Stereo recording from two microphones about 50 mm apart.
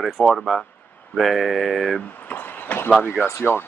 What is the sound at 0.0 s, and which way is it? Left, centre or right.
Speech, centre.